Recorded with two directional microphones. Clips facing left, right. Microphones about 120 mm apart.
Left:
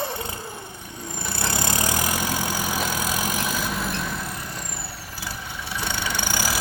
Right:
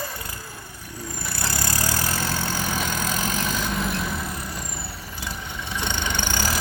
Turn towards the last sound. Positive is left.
turn(degrees=10)  # may be behind; listen again after turning